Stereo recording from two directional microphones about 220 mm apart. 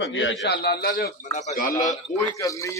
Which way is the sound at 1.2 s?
30° left (ahead or behind).